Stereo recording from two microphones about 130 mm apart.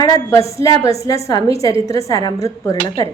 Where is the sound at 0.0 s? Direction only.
25° left (ahead or behind).